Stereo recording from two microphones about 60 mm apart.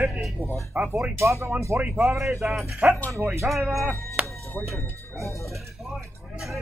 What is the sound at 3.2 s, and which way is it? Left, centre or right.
Speech, right.